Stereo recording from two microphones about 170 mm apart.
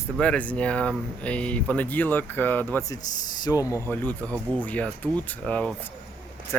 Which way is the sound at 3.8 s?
10° left (ahead or behind).